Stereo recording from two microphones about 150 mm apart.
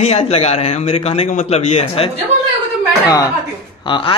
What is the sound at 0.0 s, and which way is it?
A man's voice, 45° left (ahead or behind).